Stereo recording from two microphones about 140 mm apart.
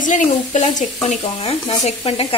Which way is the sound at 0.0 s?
60° left (ahead or behind).